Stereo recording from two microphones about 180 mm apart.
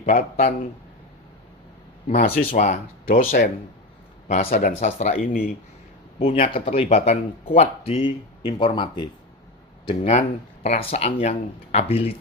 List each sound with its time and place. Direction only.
0.0 s speech: 50° left (ahead or behind)
2.0 s speech: 40° left (ahead or behind)
3.3 s speech: 55° left (ahead or behind)
4.3 s speech: 40° left (ahead or behind)
6.1 s speech: 35° left (ahead or behind)